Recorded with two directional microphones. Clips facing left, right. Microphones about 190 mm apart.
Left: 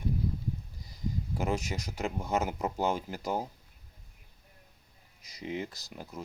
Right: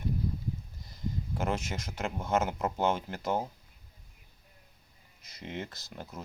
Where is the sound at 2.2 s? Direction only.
10° left (ahead or behind).